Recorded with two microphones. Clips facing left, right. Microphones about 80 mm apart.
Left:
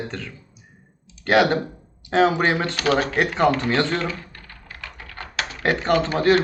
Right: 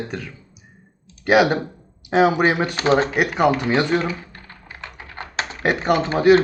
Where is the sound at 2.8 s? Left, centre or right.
Right.